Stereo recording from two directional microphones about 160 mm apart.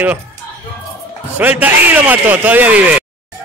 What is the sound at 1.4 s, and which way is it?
A man's voice, 10° right (ahead or behind).